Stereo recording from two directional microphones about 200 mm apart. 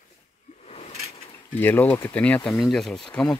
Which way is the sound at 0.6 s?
30° left (ahead or behind).